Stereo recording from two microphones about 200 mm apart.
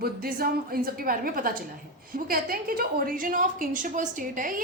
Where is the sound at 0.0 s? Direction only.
50° right (ahead or behind).